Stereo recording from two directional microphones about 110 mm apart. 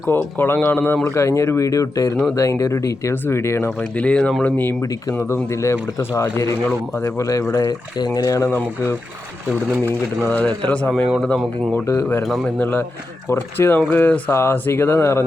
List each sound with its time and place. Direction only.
0.1 s a man's voice: 20° left (ahead or behind)
4.8 s speech: 30° left (ahead or behind)
8.4 s speech: 20° left (ahead or behind)
10.2 s a man's voice: 15° left (ahead or behind)
11.1 s speech: centre (ahead or behind)
11.7 s speech: 25° left (ahead or behind)
12.2 s speech: centre (ahead or behind)
12.5 s a man's voice: 15° left (ahead or behind)